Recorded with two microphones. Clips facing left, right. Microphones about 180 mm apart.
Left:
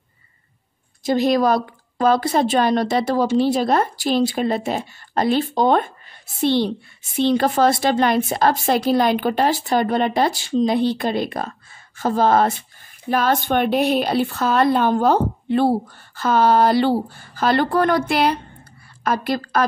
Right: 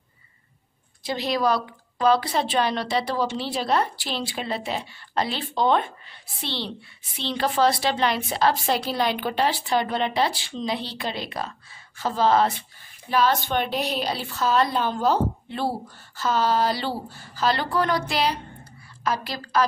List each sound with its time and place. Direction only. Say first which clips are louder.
1.0 s a woman's voice: left 7 dB; 45° left (ahead or behind)